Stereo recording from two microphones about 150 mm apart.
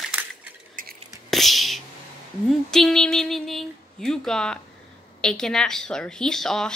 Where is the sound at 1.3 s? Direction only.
Centre (ahead or behind).